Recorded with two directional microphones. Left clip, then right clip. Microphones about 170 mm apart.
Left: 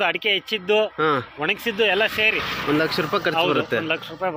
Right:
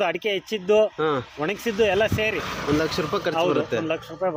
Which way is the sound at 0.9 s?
10° left (ahead or behind).